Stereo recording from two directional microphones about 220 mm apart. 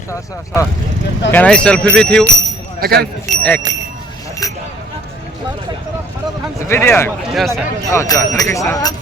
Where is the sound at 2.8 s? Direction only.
45° right (ahead or behind).